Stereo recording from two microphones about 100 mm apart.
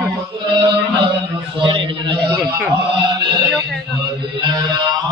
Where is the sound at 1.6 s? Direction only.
60° right (ahead or behind).